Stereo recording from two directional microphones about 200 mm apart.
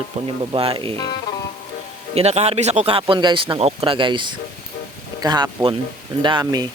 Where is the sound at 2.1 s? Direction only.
30° right (ahead or behind).